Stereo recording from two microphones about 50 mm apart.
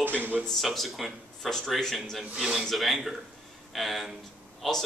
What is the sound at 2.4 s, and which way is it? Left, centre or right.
Speech, centre.